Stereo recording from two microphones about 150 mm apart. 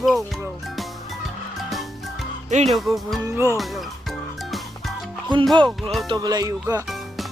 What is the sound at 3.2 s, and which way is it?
Speech, 20° right (ahead or behind).